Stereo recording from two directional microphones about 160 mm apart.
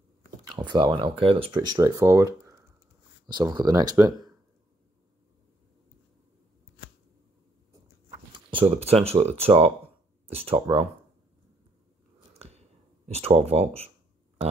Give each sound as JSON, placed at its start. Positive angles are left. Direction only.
{"t": 0.5, "sound": "speech", "side_deg": -30}
{"t": 8.3, "sound": "speech", "side_deg": -30}
{"t": 12.4, "sound": "a sound", "side_deg": -40}